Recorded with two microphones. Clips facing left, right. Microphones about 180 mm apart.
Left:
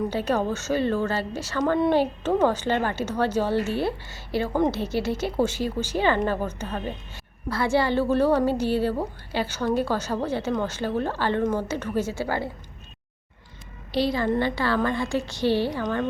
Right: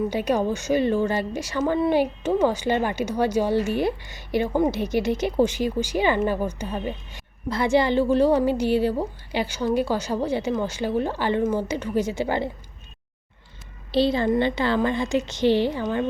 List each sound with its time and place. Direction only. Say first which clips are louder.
0.1 s a woman's voice: right 2 dB; 15° right (ahead or behind)
13.9 s a woman's voice: right 3 dB; 25° right (ahead or behind)